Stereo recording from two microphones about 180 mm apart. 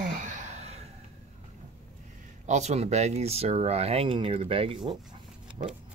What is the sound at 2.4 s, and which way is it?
Speech, 40° right (ahead or behind).